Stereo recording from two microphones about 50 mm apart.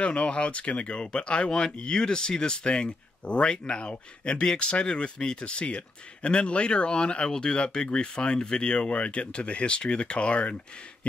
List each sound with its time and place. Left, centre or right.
0.0 s speech: left